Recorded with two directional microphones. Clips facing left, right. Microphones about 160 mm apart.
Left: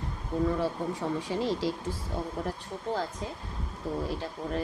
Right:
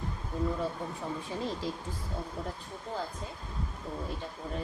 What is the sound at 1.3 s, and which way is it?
Speech, 90° left.